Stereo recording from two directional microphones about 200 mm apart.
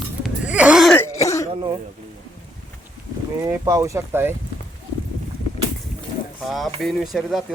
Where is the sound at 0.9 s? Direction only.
15° left (ahead or behind).